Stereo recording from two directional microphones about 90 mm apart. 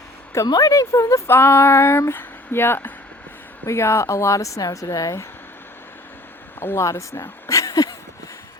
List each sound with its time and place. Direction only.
0.4 s a woman's voice: 45° left (ahead or behind)
1.3 s a woman's voice: 25° left (ahead or behind)
6.6 s speech: 30° left (ahead or behind)